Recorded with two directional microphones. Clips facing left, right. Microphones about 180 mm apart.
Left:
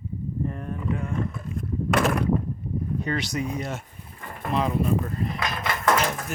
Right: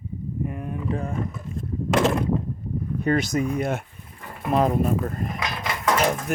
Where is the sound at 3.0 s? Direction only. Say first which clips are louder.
Right 10 dB; 50° right (ahead or behind).